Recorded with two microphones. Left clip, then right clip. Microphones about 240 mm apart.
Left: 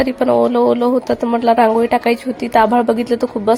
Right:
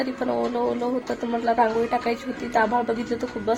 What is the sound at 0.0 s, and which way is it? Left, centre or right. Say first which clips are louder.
Speech: left 12 dB; left.